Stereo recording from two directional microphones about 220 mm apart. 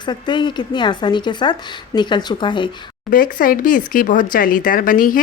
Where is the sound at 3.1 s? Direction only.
40° left (ahead or behind).